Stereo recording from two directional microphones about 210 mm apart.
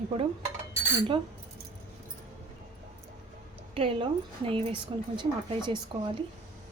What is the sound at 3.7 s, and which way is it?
Speech, 25° right (ahead or behind).